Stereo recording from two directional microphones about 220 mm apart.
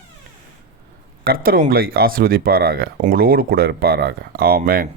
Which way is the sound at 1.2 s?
40° right (ahead or behind).